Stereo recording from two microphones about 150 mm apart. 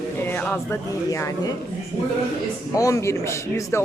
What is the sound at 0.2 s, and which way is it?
Speech, 15° left (ahead or behind).